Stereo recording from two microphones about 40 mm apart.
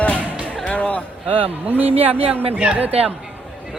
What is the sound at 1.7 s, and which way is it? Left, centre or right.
Speech, right.